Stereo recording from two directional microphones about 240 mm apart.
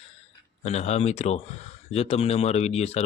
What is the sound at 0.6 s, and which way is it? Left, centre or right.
Speech, left.